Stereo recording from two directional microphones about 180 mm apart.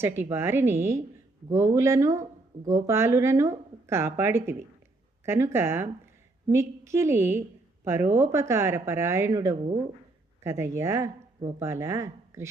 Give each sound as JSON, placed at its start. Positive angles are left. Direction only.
{"t": 0.0, "sound": "a woman's voice", "side_deg": -15}